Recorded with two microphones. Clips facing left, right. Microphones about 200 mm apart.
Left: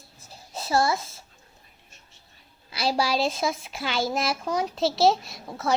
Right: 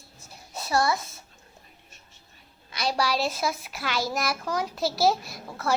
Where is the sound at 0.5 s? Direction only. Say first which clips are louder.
Left 1 dB; 25° left (ahead or behind).